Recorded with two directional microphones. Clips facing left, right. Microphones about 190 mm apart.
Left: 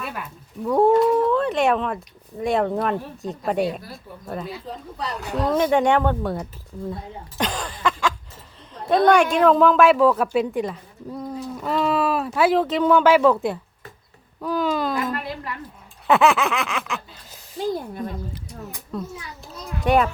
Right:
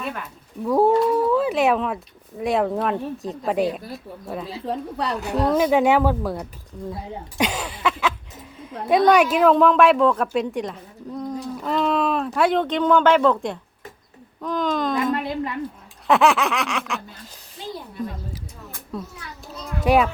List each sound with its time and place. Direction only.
0.0 s a woman's voice: centre (ahead or behind)
4.6 s a woman's voice: 65° right (ahead or behind)
5.4 s a woman's voice: 5° right (ahead or behind)
15.1 s a woman's voice: 20° right (ahead or behind)
16.0 s a woman's voice: centre (ahead or behind)
17.6 s speech: 45° left (ahead or behind)
18.9 s a woman's voice: centre (ahead or behind)